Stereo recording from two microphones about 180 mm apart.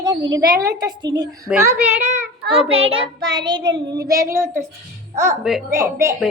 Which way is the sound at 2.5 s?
30° right (ahead or behind).